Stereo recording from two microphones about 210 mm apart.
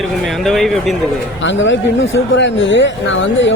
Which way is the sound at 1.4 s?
60° left (ahead or behind).